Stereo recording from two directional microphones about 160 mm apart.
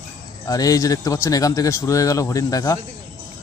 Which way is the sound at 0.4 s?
20° left (ahead or behind).